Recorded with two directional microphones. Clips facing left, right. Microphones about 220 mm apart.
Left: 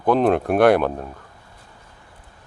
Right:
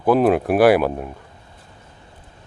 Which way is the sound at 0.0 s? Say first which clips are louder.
Right 2 dB; 5° right (ahead or behind).